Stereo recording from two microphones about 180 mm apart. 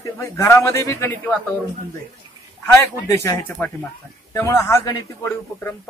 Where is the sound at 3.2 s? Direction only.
10° left (ahead or behind).